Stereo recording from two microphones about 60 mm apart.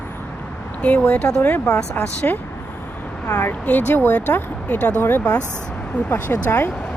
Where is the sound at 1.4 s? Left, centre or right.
Left.